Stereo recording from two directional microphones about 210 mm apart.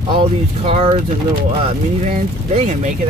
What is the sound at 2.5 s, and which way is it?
Speech, 35° right (ahead or behind).